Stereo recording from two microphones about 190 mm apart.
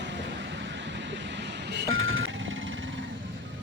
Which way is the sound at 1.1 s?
70° right (ahead or behind).